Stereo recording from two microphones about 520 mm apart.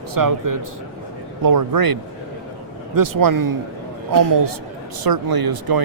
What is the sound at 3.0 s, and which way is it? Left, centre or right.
A man's voice, right.